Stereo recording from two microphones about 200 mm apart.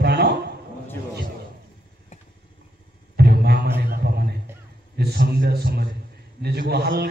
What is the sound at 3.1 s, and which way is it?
Music, 55° right (ahead or behind).